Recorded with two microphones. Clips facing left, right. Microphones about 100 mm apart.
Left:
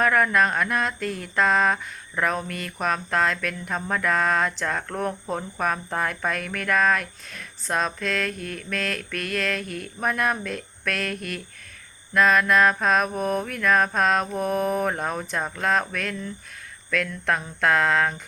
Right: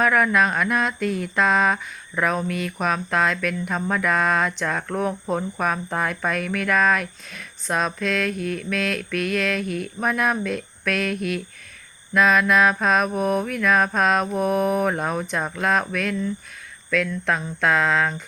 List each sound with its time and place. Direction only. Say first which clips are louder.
0.1 s speech: right 1 dB; 5° right (ahead or behind)
0.9 s mantra: right 5 dB; 45° left (ahead or behind)
1.4 s speech: right 1 dB; 5° right (ahead or behind)
2.5 s mantra: right 6 dB; 45° left (ahead or behind)
2.7 s speech: even; 5° right (ahead or behind)
8.4 s mantra: right 7 dB; 50° left (ahead or behind)
8.7 s speech: right 2 dB; 5° right (ahead or behind)